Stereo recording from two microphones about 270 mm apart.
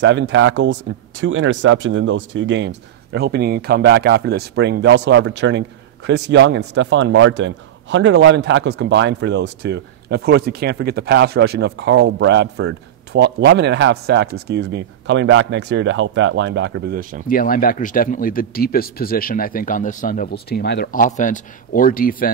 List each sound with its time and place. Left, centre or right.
0.0 s a man's voice: right
17.3 s speech: left